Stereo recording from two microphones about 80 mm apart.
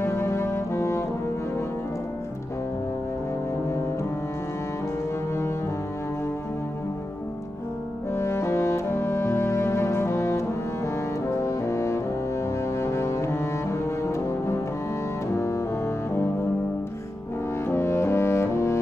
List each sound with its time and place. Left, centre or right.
0.0 s brass instrument: left
8.1 s music: left
11.4 s cello: left
12.7 s double bass: left
15.3 s double bass: left
17.6 s music: left